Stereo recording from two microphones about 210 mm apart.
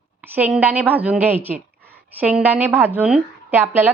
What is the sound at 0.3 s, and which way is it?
A woman's voice, 10° right (ahead or behind).